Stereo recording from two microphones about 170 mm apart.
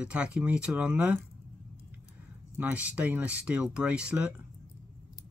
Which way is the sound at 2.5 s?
10° right (ahead or behind).